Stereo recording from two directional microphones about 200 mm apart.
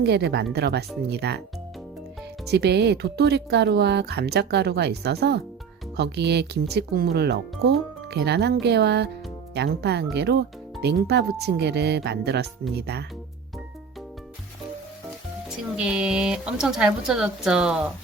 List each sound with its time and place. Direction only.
0.0 s speech: 55° right (ahead or behind)
2.5 s speech: 55° right (ahead or behind)
15.4 s speech: 5° right (ahead or behind)